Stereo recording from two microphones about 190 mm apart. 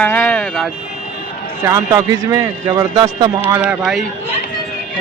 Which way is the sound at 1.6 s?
15° right (ahead or behind).